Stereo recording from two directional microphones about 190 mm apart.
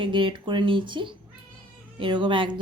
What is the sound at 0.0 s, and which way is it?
Speech, 25° right (ahead or behind).